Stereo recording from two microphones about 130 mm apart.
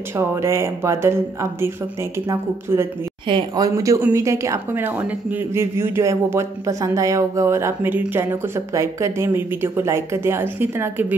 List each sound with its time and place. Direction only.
0.1 s speech: 20° right (ahead or behind)
3.3 s speech: 35° right (ahead or behind); by 11.1 s 15° right (ahead or behind)